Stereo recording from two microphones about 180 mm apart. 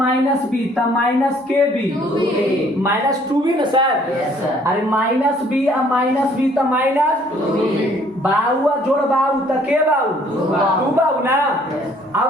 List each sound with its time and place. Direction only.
2.8 s a man's voice: 20° right (ahead or behind)